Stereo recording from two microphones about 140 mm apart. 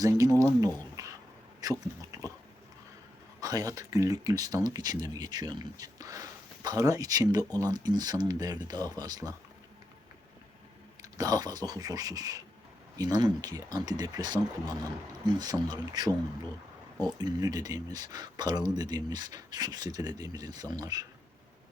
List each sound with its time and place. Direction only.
0.0 s speech: 25° right (ahead or behind)
3.4 s speech: 25° right (ahead or behind)
11.2 s speech: 30° right (ahead or behind)